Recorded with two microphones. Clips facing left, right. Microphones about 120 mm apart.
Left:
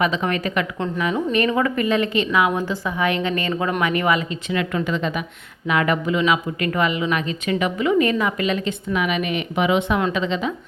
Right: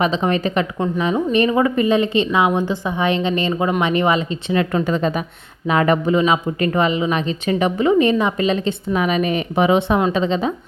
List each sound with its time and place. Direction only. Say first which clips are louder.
0.0 s a woman's voice: right 3 dB; 25° right (ahead or behind)